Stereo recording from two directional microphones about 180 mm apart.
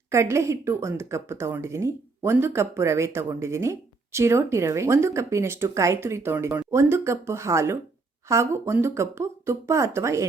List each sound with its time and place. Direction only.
0.1 s speech: 15° right (ahead or behind)